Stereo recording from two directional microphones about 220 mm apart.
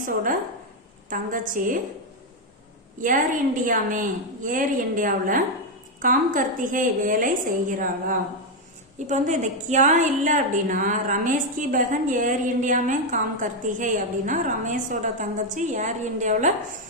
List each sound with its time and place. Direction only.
1.1 s a woman's voice: 40° right (ahead or behind)
3.0 s a woman's voice: 40° right (ahead or behind)